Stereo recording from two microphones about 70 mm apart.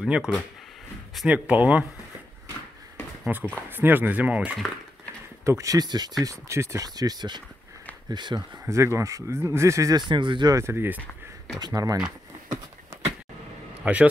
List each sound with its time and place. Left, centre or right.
0.0 s speech: centre
3.3 s speech: right
5.4 s speech: right
5.8 s speech: right
6.2 s speech: right
6.8 s speech: right
8.6 s speech: right
9.9 s speech: right
10.5 s speech: right
11.0 s a sound: centre
11.6 s speech: right
13.9 s speech: right